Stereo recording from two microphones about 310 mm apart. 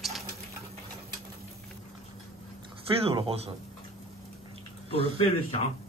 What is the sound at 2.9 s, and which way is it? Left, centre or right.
Speech, centre.